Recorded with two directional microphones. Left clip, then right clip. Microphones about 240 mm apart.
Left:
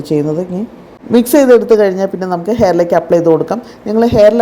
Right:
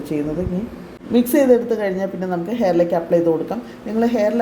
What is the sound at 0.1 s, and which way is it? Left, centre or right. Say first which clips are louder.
A woman's voice: left 9 dB; left.